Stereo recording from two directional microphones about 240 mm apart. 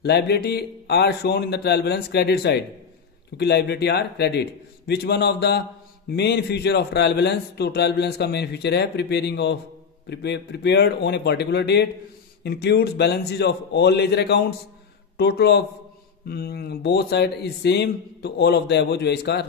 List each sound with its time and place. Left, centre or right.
0.0 s a man's voice: left